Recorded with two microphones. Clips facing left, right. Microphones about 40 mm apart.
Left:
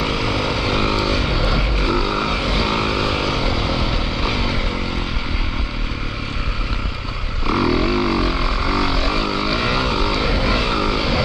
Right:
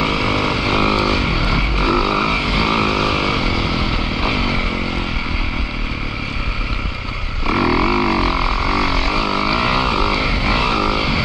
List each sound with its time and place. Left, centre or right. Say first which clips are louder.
0.0 s vehicle: right 3 dB; right
7.4 s didgeridoo: right 2 dB; right
9.6 s vehicle: right 3 dB; right
9.8 s vehicle: right 2 dB; right
10.7 s vehicle: right 2 dB; right